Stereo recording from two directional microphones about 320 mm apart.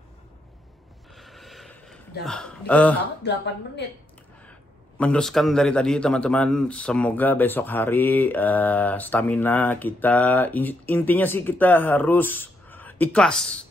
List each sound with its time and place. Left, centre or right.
1.1 s a sound: centre
2.2 s a man's voice: centre
3.2 s a woman's voice: left
4.5 s a man's voice: centre